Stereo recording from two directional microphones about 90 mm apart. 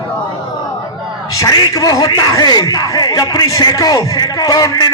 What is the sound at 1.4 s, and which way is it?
A man's voice, 45° left (ahead or behind).